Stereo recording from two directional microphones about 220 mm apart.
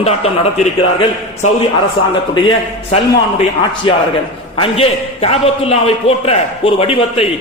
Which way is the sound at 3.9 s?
25° left (ahead or behind).